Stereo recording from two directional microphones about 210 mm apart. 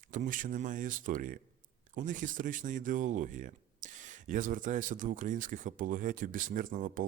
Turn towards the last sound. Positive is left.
turn(degrees=-40)  # may be behind; listen again after turning